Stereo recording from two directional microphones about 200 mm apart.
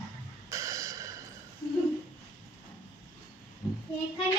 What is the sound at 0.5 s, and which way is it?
Snort, 15° right (ahead or behind).